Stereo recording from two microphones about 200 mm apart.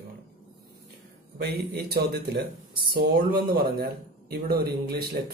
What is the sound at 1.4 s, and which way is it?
Speech, 55° right (ahead or behind).